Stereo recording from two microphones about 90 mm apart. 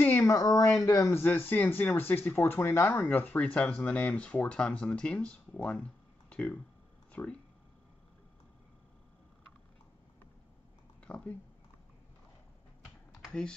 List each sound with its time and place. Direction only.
0.2 s speech: 35° left (ahead or behind)
1.2 s speech: 20° left (ahead or behind)
11.1 s speech: 15° left (ahead or behind)
13.3 s speech: 10° left (ahead or behind)